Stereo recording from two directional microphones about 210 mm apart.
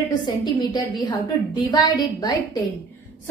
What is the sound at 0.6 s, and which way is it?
A woman's voice, 20° left (ahead or behind).